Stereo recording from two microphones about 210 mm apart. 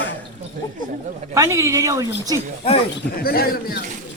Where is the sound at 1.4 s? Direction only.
15° right (ahead or behind).